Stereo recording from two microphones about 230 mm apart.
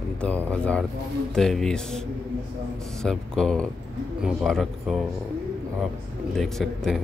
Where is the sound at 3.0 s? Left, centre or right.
Centre.